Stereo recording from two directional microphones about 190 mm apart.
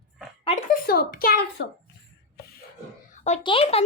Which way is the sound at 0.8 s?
50° left (ahead or behind).